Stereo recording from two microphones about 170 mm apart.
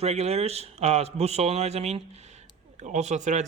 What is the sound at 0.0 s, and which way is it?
A man's voice, 40° right (ahead or behind).